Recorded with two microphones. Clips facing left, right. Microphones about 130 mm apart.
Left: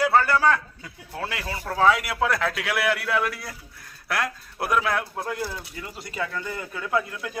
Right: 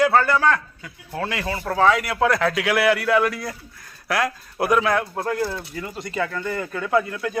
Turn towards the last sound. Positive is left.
turn(degrees=5)  # may be behind; listen again after turning